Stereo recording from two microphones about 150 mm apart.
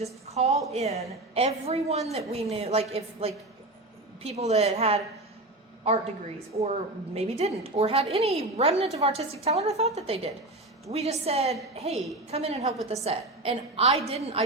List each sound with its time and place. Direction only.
0.0 s a woman's voice: 45° right (ahead or behind)
6.6 s a woman's voice: 45° right (ahead or behind)